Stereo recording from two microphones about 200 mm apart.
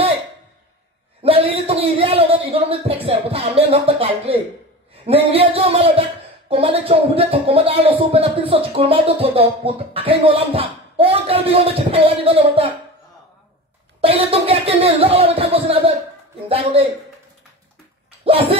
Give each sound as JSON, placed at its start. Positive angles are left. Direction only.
{"t": 1.2, "sound": "a sound", "side_deg": -30}
{"t": 3.7, "sound": "speech", "side_deg": -30}
{"t": 14.0, "sound": "speech", "side_deg": -30}
{"t": 18.2, "sound": "speech", "side_deg": -30}